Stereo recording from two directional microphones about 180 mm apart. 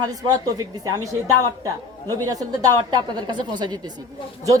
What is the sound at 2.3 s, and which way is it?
A woman's voice, 20° right (ahead or behind).